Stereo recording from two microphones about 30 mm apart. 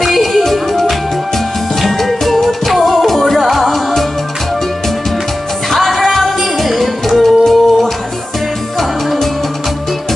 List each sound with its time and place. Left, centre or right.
0.0 s music: centre
5.7 s music: centre